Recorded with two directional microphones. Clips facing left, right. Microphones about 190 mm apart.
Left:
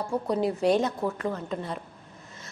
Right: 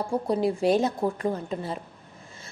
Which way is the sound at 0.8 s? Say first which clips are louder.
Right 3 dB; 30° right (ahead or behind).